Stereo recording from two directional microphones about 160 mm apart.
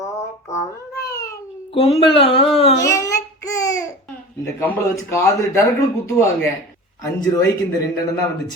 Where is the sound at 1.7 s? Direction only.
35° left (ahead or behind).